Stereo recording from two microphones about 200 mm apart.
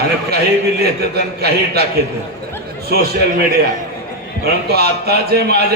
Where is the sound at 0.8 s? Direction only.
50° right (ahead or behind).